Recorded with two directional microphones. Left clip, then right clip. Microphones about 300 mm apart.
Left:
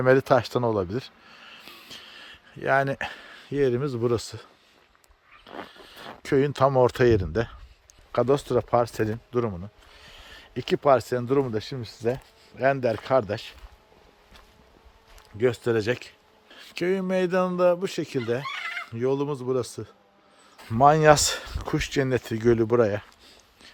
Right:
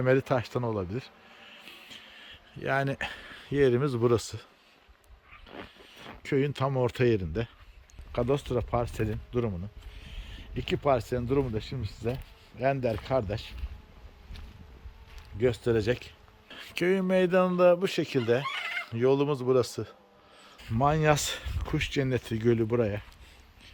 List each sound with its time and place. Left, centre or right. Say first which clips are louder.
0.0 s speech: left 6 dB; centre
5.5 s speech: left 6 dB; centre
15.4 s speech: left 3 dB; centre
18.4 s fowl: left 1 dB; right
18.9 s speech: right 1 dB; centre
20.6 s speech: left 9 dB; centre